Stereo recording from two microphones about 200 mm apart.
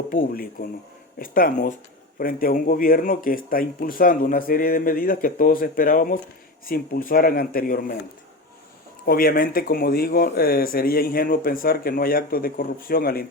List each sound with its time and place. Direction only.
0.1 s speech: 45° left (ahead or behind)
9.0 s speech: 45° left (ahead or behind)